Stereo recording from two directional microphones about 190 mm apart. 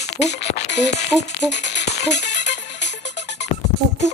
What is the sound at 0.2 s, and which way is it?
Speech, 35° left (ahead or behind).